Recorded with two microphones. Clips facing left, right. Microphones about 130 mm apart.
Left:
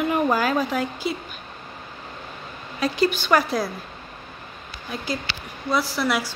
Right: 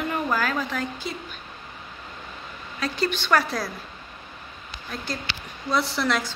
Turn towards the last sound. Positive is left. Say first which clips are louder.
# left 1 dB
turn(degrees=5)  # may be behind; listen again after turning